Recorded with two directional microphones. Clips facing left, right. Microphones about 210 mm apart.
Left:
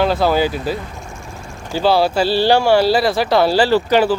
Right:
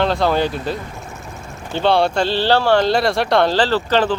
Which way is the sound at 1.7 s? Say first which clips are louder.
Left 1 dB; 5° left (ahead or behind).